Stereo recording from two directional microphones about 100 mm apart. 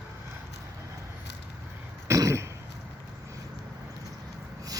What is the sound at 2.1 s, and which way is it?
Throat clearing, 30° right (ahead or behind).